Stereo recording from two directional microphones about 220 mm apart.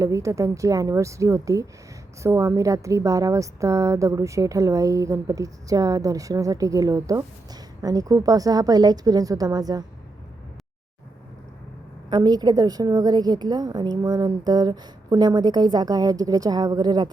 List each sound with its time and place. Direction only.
0.0 s a woman's voice: 15° right (ahead or behind)
12.1 s a woman's voice: 20° right (ahead or behind)